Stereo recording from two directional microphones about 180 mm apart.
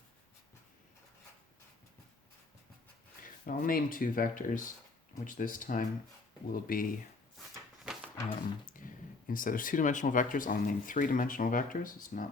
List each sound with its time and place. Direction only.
3.4 s speech: 55° left (ahead or behind)
8.6 s speech: 50° left (ahead or behind)